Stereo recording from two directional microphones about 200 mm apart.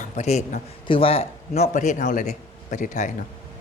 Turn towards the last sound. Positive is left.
turn(degrees=40)  # may be behind; listen again after turning